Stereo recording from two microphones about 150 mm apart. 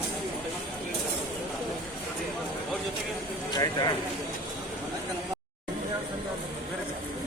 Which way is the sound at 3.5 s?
30° left (ahead or behind).